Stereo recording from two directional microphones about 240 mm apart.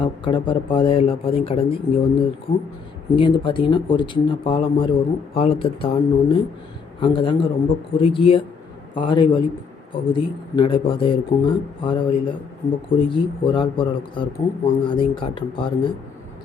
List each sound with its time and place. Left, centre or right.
0.0 s speech: centre